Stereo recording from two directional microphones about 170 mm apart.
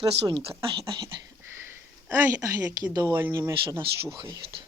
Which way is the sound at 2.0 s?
15° right (ahead or behind).